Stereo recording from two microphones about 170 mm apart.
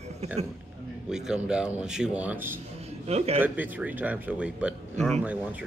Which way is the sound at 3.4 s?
10° right (ahead or behind).